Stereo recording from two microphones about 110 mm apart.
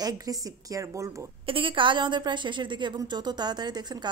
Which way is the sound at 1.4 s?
50° right (ahead or behind).